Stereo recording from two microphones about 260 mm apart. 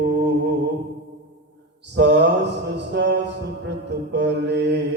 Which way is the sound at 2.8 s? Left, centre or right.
Right.